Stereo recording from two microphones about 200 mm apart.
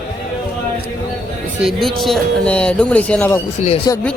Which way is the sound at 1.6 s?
Centre (ahead or behind).